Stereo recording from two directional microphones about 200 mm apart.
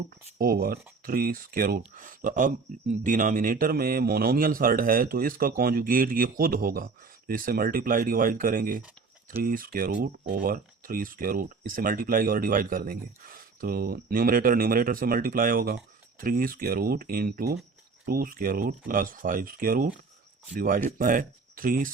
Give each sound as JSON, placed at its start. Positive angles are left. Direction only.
{"t": 0.3, "sound": "speech", "side_deg": -45}